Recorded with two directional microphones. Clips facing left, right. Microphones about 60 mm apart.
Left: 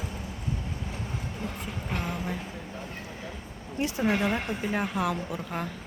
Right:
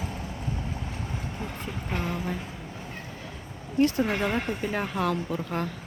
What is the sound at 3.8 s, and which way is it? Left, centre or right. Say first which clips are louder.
Speech: right 4 dB; centre.